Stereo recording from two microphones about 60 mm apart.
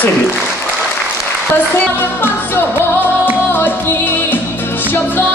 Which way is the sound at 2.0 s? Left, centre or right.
Left.